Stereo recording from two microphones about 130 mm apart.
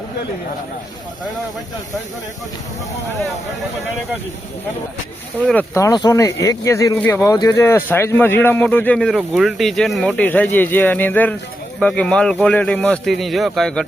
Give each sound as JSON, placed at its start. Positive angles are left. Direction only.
{"t": 5.7, "sound": "speech", "side_deg": 25}
{"t": 9.1, "sound": "speech", "side_deg": -5}